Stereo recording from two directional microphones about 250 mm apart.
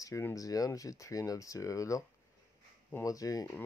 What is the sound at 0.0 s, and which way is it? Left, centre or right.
Speech, centre.